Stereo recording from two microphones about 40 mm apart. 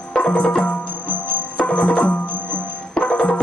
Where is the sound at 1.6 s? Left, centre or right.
Left.